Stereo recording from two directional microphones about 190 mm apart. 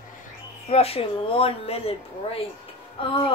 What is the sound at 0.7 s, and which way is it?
Speech, 30° left (ahead or behind).